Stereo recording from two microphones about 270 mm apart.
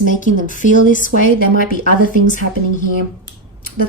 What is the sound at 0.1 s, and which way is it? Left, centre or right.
Speech, left.